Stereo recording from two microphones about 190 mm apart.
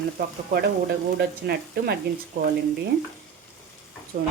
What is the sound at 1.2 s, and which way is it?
Speech, 55° right (ahead or behind).